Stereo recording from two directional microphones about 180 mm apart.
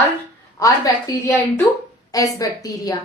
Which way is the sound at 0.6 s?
20° left (ahead or behind).